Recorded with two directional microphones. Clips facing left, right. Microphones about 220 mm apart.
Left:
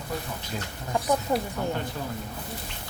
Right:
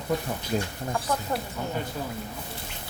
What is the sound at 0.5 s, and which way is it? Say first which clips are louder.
Speech: right 8 dB; 45° right (ahead or behind).